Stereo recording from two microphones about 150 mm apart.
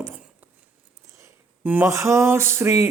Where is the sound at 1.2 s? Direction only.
15° right (ahead or behind).